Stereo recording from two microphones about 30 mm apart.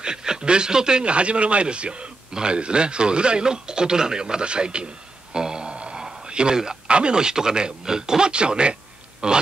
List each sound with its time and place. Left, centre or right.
0.0 s a man's voice: right
1.0 s a man's voice: right
5.3 s a sound: right
6.9 s speech: right
7.2 s speech: right
8.3 s a man's voice: right